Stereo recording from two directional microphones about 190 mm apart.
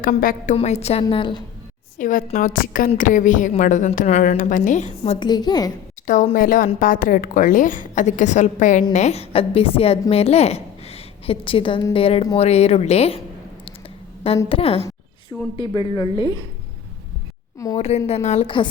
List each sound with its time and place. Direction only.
0.0 s a woman's voice: 50° left (ahead or behind); by 1.4 s 25° left (ahead or behind)
2.0 s a woman's voice: 40° left (ahead or behind)
5.0 s a woman's voice: 20° left (ahead or behind)
6.3 s a woman's voice: 50° left (ahead or behind); by 13.2 s 30° left (ahead or behind)
14.5 s a woman's voice: 30° left (ahead or behind)
17.7 s a woman's voice: 35° left (ahead or behind)